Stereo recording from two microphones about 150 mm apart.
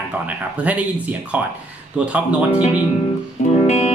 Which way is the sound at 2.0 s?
10° right (ahead or behind).